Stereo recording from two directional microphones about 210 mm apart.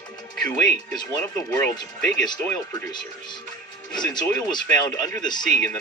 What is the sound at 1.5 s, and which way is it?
Speech, 10° left (ahead or behind).